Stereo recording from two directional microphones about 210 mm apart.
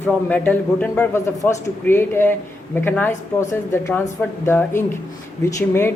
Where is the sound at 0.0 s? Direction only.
10° left (ahead or behind).